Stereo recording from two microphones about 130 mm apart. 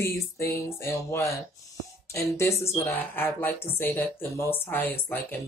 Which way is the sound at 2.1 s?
20° left (ahead or behind).